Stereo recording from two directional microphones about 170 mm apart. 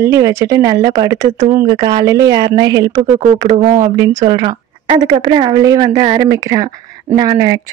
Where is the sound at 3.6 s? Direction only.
45° right (ahead or behind).